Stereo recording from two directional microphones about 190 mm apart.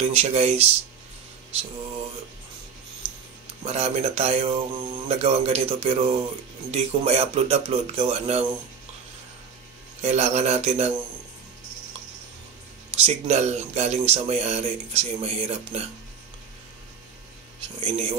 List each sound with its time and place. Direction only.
0.0 s speech: 35° right (ahead or behind)
3.6 s speech: 35° right (ahead or behind)
10.0 s speech: 35° right (ahead or behind)
13.0 s speech: 35° right (ahead or behind)
17.7 s speech: 25° right (ahead or behind)